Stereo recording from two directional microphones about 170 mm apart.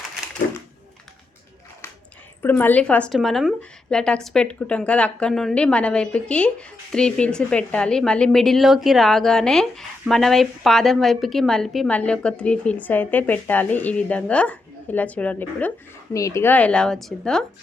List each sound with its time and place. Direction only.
2.4 s speech: 10° left (ahead or behind)